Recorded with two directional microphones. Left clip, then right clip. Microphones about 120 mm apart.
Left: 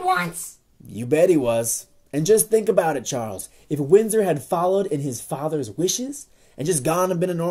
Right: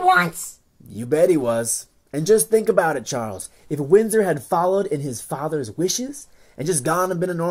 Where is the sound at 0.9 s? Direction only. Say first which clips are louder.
Even; 20° left (ahead or behind).